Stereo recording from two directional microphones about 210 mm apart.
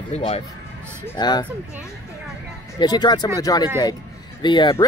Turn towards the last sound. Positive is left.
turn(degrees=20)  # may be behind; listen again after turning